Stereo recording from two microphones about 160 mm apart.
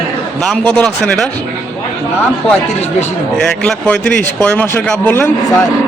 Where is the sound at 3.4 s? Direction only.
5° left (ahead or behind).